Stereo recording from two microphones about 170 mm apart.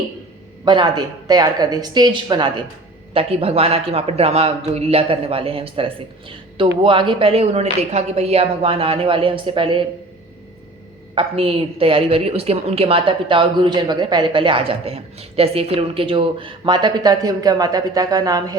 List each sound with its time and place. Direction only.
0.6 s a woman's voice: 25° right (ahead or behind)
11.1 s a woman's voice: 35° right (ahead or behind)